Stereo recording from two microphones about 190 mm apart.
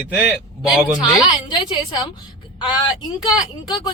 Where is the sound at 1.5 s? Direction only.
25° left (ahead or behind).